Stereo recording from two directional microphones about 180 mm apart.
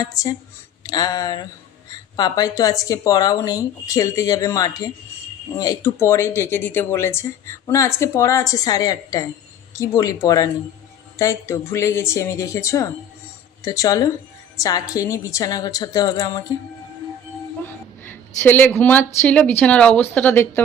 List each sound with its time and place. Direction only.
0.0 s speech: 20° left (ahead or behind)
18.0 s speech: 10° left (ahead or behind)